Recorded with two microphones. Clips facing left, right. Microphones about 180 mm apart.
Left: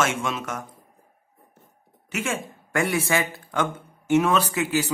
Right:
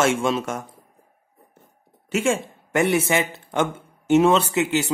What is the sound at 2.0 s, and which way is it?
Speech, 30° right (ahead or behind).